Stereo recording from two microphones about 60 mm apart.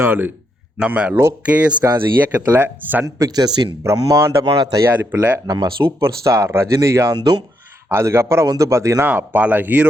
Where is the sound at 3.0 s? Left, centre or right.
Right.